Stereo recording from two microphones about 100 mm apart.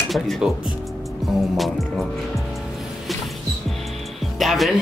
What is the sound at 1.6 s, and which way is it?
Speech, centre (ahead or behind).